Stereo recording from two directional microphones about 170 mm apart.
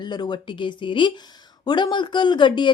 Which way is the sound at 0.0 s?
25° left (ahead or behind).